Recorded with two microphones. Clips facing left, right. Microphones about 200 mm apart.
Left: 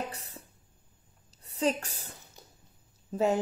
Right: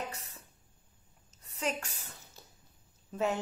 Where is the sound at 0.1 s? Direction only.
30° left (ahead or behind).